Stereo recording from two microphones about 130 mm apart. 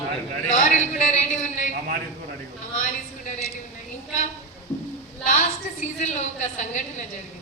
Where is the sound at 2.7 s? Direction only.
70° left (ahead or behind).